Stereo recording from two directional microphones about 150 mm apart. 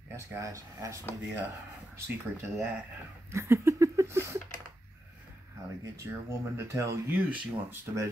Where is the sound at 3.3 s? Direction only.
20° right (ahead or behind).